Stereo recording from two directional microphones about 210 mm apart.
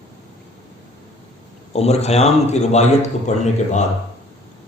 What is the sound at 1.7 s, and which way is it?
A man's voice, 30° left (ahead or behind).